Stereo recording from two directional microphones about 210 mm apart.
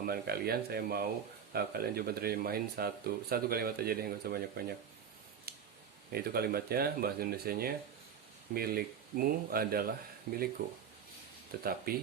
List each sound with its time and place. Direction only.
0.0 s speech: 45° right (ahead or behind)
5.5 s a sound: 50° right (ahead or behind)
6.1 s speech: 45° right (ahead or behind)
11.5 s speech: 45° right (ahead or behind)